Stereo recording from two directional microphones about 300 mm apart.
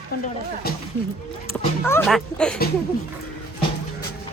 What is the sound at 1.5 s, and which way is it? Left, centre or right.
Speech, centre.